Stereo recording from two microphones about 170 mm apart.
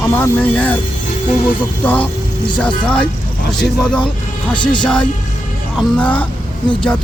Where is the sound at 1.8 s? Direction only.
10° left (ahead or behind).